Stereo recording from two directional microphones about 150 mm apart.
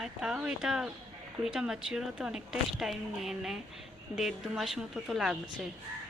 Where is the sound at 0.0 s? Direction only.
5° right (ahead or behind).